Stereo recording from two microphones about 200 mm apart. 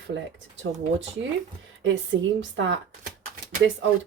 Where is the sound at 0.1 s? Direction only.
65° right (ahead or behind).